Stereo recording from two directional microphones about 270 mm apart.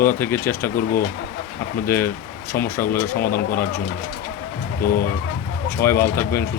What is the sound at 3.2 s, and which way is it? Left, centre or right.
Speech, left.